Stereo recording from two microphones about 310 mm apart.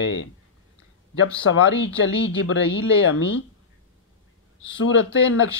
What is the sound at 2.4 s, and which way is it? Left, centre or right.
Speech, left.